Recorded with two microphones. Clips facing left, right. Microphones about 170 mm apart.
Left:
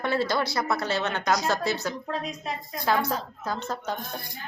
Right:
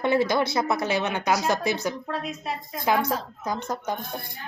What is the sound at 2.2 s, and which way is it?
Speech, 5° right (ahead or behind).